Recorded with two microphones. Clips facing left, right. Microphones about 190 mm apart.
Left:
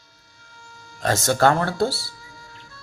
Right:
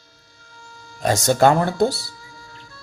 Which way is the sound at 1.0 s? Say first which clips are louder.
Right 3 dB; 15° right (ahead or behind).